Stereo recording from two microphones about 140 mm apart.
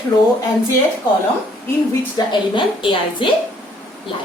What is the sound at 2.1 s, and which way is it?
A woman's voice, 35° left (ahead or behind).